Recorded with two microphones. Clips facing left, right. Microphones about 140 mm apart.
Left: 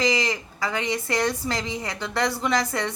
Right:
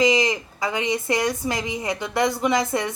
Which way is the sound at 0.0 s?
20° right (ahead or behind).